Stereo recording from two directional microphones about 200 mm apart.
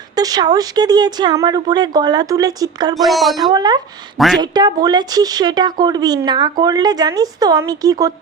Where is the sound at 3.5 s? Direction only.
20° right (ahead or behind).